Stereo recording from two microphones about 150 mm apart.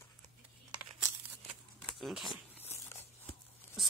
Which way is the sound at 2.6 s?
15° left (ahead or behind).